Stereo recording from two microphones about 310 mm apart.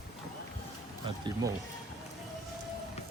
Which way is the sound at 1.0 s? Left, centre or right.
Centre.